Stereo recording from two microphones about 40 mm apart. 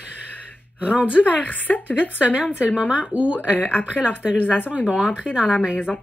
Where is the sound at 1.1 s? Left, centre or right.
Left.